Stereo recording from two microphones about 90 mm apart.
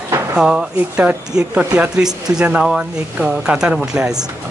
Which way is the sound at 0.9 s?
20° right (ahead or behind).